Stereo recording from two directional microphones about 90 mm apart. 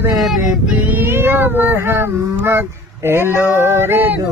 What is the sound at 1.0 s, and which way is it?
Cat, 25° right (ahead or behind).